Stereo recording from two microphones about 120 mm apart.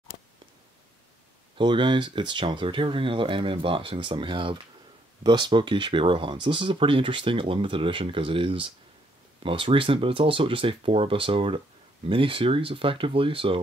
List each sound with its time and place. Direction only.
1.6 s speech: 40° right (ahead or behind)